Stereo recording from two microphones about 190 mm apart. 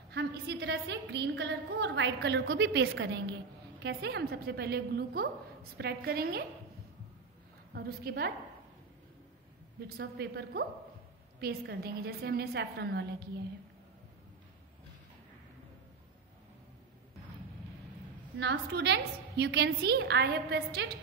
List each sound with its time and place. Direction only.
0.1 s a woman's voice: 60° right (ahead or behind)
7.7 s a woman's voice: 55° right (ahead or behind)
9.8 s a woman's voice: 55° right (ahead or behind)
18.4 s a woman's voice: 65° right (ahead or behind)